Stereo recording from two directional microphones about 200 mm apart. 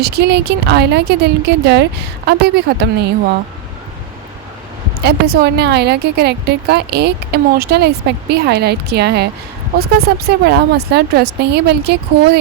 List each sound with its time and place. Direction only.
0.0 s a woman's voice: 55° right (ahead or behind)
5.0 s a woman's voice: 50° right (ahead or behind)